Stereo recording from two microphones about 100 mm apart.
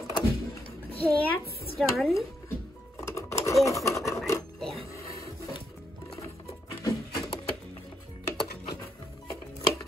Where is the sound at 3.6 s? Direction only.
30° left (ahead or behind).